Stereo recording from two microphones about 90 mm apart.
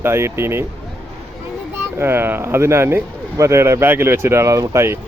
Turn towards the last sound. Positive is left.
turn(degrees=-30)  # may be behind; listen again after turning